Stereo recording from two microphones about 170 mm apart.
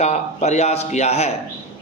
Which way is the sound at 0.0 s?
40° left (ahead or behind).